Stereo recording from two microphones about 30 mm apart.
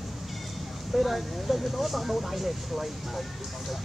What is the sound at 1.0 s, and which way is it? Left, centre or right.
Speech, centre.